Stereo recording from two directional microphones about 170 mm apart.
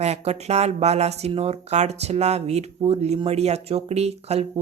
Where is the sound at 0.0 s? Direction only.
40° right (ahead or behind).